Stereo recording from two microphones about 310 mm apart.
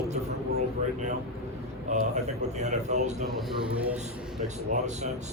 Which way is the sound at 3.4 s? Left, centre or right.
Centre.